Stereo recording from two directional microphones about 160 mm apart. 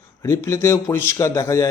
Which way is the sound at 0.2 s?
20° left (ahead or behind).